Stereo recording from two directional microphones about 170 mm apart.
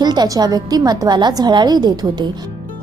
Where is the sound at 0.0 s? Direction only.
25° right (ahead or behind).